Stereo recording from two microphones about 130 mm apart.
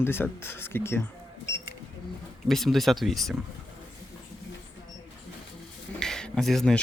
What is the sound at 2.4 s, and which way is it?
Speech, centre (ahead or behind).